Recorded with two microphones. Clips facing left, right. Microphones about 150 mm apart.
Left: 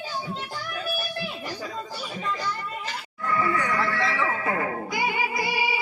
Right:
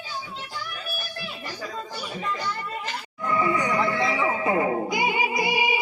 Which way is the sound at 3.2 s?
20° right (ahead or behind).